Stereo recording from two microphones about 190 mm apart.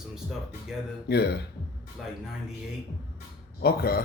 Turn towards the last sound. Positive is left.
turn(degrees=55)  # may be behind; listen again after turning